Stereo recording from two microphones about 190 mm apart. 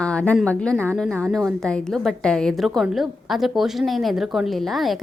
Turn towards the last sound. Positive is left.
turn(degrees=0)  # may be behind; listen again after turning